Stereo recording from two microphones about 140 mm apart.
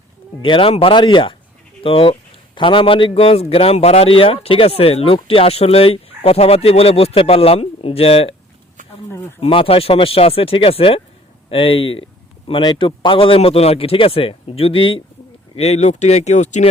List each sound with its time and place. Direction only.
0.4 s a man's voice: 40° left (ahead or behind)
9.4 s a man's voice: 40° left (ahead or behind)
15.5 s speech: 50° left (ahead or behind)